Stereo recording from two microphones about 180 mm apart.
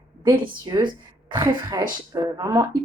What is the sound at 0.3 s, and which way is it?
Speech, 25° right (ahead or behind).